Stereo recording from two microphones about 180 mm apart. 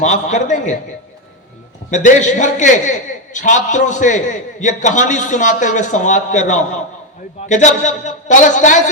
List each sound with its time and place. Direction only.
0.0 s a man's voice: 40° left (ahead or behind)
1.9 s a man's voice: 45° left (ahead or behind)